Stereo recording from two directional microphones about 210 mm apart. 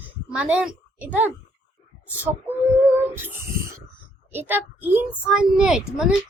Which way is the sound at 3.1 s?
10° right (ahead or behind).